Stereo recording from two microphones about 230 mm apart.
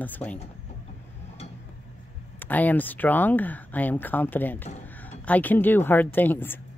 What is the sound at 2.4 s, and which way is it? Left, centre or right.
Speech, centre.